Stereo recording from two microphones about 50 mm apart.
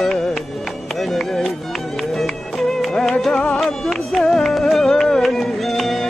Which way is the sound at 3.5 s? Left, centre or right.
Centre.